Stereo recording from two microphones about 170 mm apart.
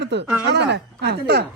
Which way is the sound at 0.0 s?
90° right.